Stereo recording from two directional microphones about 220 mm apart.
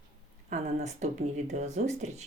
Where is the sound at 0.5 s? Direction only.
30° right (ahead or behind).